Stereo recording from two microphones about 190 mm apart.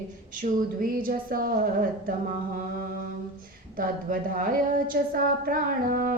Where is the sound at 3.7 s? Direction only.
45° right (ahead or behind).